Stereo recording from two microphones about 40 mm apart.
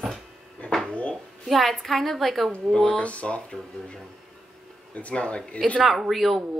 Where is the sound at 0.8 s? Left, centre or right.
Left.